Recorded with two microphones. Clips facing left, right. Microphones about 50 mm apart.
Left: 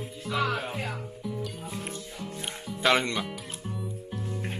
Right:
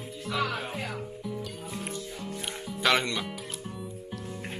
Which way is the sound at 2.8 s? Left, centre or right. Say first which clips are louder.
Left 1 dB; left.